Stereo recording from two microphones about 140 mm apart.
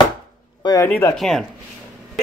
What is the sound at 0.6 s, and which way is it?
Speech, 25° left (ahead or behind).